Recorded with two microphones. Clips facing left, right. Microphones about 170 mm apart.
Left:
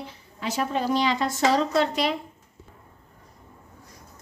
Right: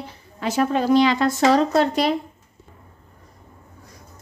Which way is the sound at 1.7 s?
45° right (ahead or behind).